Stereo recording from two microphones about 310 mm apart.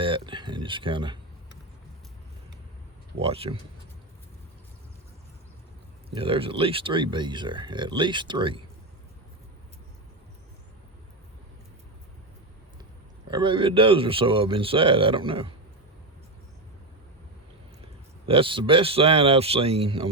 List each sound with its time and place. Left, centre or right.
0.0 s speech: centre
3.2 s speech: centre
6.1 s speech: centre
13.3 s speech: centre
18.3 s speech: centre